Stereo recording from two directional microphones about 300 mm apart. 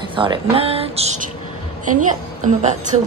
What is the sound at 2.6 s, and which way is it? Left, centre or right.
Speech, right.